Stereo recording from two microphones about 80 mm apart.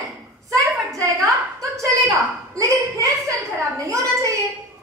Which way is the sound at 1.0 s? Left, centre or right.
Right.